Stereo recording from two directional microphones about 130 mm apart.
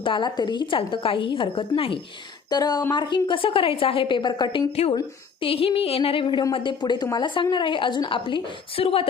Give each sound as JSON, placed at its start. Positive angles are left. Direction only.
{"t": 0.0, "sound": "a woman's voice", "side_deg": 40}
{"t": 2.5, "sound": "a woman's voice", "side_deg": 30}
{"t": 5.4, "sound": "a woman's voice", "side_deg": 45}